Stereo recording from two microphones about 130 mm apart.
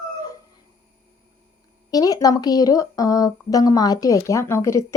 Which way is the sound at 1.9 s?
30° left (ahead or behind).